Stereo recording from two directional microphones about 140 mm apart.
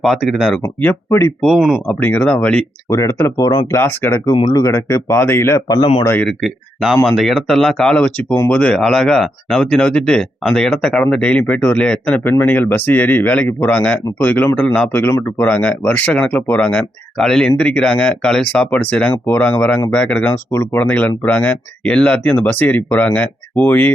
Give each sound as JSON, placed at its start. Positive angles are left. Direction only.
{"t": 0.0, "sound": "speech", "side_deg": 0}
{"t": 0.6, "sound": "speech", "side_deg": 15}
{"t": 1.4, "sound": "speech", "side_deg": 0}
{"t": 2.9, "sound": "speech", "side_deg": 20}
{"t": 3.8, "sound": "speech", "side_deg": 15}
{"t": 4.3, "sound": "speech", "side_deg": 40}
{"t": 4.5, "sound": "speech", "side_deg": 20}
{"t": 6.2, "sound": "speech", "side_deg": 0}